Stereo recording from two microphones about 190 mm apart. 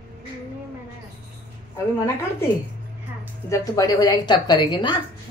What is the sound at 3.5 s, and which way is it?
A woman's voice, 15° left (ahead or behind).